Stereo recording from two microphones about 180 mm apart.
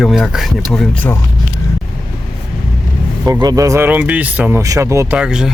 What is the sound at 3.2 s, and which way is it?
Speech, 20° right (ahead or behind).